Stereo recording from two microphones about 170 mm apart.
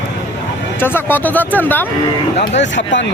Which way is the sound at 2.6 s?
90° left.